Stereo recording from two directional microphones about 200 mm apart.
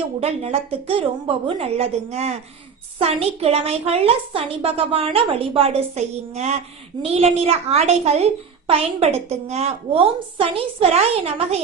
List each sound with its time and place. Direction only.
0.2 s a woman's voice: 30° right (ahead or behind)